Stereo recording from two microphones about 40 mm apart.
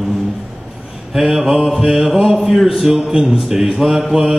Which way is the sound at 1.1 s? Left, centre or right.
Centre.